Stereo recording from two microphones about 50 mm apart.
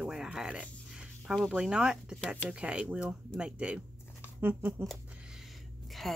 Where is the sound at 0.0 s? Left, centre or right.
Centre.